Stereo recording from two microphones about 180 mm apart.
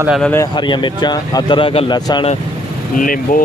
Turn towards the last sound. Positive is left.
turn(degrees=50)  # may be behind; listen again after turning